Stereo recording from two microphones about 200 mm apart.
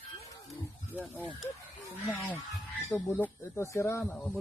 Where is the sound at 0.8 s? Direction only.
10° left (ahead or behind).